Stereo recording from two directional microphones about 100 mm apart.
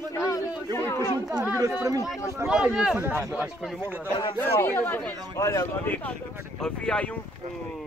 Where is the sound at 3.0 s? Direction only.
25° right (ahead or behind).